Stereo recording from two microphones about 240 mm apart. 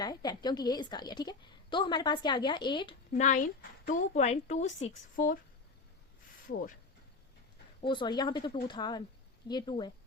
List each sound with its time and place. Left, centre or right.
0.0 s a woman's voice: centre
3.1 s a woman's voice: left
7.8 s a woman's voice: centre